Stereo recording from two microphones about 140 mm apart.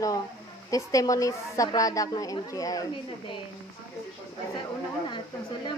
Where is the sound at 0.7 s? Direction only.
25° left (ahead or behind).